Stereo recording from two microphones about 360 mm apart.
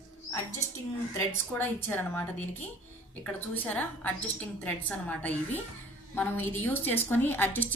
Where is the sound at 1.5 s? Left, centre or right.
Centre.